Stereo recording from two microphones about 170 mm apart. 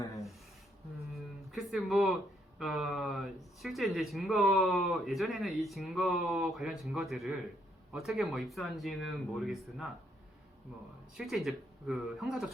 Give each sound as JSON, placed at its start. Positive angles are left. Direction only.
{"t": 1.1, "sound": "music", "side_deg": 0}
{"t": 2.6, "sound": "speech", "side_deg": 0}
{"t": 11.2, "sound": "speech", "side_deg": 0}